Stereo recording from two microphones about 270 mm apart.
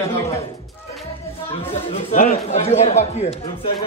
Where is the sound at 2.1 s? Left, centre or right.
Left.